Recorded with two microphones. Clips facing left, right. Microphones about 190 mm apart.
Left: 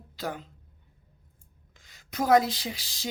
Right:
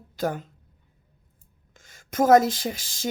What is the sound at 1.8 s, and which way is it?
Speech, 45° right (ahead or behind).